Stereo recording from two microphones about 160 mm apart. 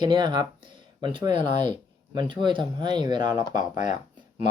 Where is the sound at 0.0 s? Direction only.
30° right (ahead or behind).